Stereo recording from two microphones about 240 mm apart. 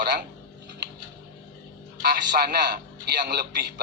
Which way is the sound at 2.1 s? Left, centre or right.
Right.